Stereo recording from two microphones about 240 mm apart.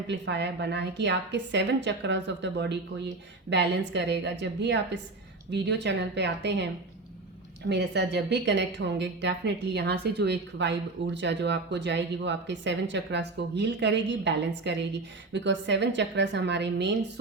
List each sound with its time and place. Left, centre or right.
0.1 s speech: right
7.7 s speech: right